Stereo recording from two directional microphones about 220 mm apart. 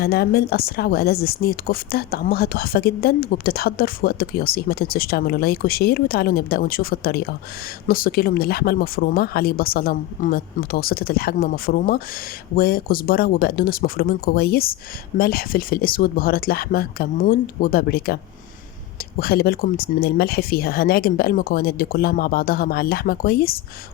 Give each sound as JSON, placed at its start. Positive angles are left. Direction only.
{"t": 0.0, "sound": "speech", "side_deg": 45}
{"t": 19.2, "sound": "speech", "side_deg": 45}